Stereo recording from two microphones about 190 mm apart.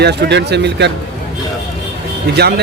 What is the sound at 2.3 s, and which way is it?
Speech, 60° right (ahead or behind).